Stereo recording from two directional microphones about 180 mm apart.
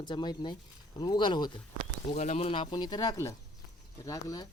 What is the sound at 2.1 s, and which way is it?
Speech, 40° left (ahead or behind).